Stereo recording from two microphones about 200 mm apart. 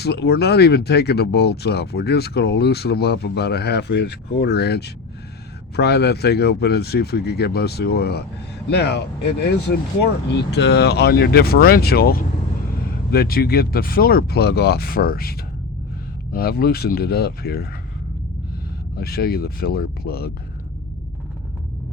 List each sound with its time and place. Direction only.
0.0 s speech: 55° left (ahead or behind)
18.9 s speech: 50° left (ahead or behind)